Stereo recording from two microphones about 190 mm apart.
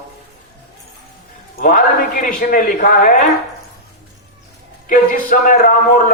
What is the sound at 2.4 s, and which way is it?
Speech, 45° left (ahead or behind).